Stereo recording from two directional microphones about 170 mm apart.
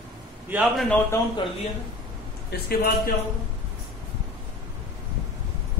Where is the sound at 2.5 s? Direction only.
65° left (ahead or behind).